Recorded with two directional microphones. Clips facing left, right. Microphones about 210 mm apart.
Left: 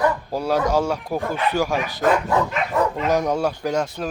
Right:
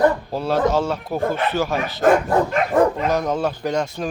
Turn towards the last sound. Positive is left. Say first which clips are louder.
# even
turn(degrees=10)  # may be behind; listen again after turning